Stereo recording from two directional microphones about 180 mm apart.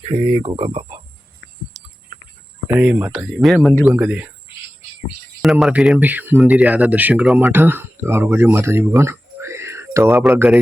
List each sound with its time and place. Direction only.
0.1 s speech: 30° right (ahead or behind)
2.6 s speech: 10° right (ahead or behind)
3.9 s speech: 10° right (ahead or behind)
5.4 s speech: centre (ahead or behind)